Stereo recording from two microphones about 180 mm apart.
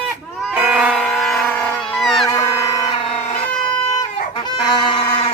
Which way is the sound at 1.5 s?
5° left (ahead or behind).